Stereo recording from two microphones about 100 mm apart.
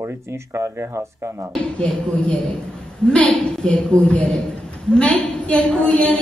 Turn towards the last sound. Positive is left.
turn(degrees=15)  # may be behind; listen again after turning